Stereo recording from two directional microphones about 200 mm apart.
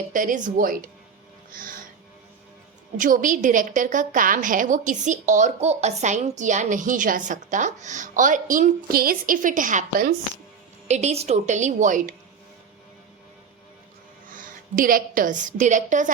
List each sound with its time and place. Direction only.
0.1 s a woman's voice: 40° right (ahead or behind)
3.0 s a woman's voice: 40° right (ahead or behind)
14.3 s a woman's voice: 40° right (ahead or behind)